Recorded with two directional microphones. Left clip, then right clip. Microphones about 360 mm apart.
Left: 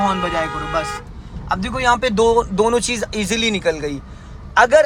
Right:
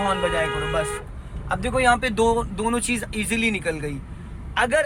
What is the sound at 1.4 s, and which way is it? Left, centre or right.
A man's voice, centre.